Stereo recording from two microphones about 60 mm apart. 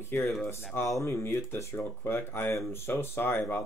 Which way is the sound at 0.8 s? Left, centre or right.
Left.